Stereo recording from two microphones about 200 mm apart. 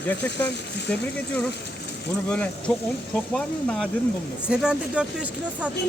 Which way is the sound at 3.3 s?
5° left (ahead or behind).